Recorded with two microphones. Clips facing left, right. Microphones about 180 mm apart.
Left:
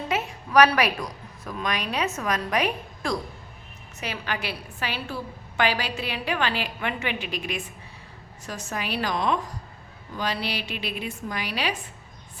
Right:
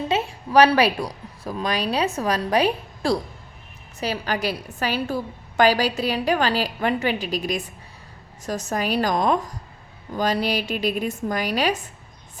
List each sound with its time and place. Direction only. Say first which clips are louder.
0.1 s a woman's voice: right 3 dB; 30° right (ahead or behind)